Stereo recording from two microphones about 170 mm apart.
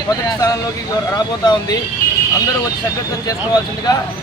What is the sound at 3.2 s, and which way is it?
Speech, 20° left (ahead or behind).